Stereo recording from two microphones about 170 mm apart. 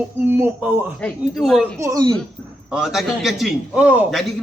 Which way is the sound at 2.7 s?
Centre (ahead or behind).